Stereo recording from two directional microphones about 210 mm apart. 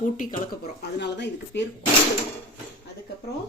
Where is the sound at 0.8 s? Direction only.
55° left (ahead or behind).